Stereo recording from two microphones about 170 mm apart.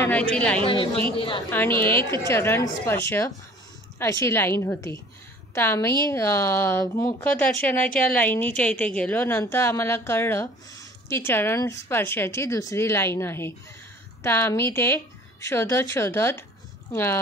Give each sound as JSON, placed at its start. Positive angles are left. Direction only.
{"t": 0.0, "sound": "speech", "side_deg": 10}
{"t": 1.1, "sound": "a woman's voice", "side_deg": 30}
{"t": 1.5, "sound": "a woman's voice", "side_deg": 10}